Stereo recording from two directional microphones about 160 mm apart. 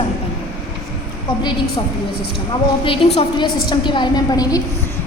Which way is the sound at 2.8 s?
35° left (ahead or behind).